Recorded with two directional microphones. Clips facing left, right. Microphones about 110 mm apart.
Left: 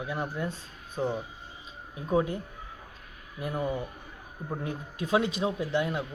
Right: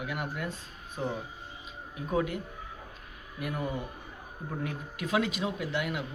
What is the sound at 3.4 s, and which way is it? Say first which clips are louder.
Speech: left 2 dB; 30° left (ahead or behind).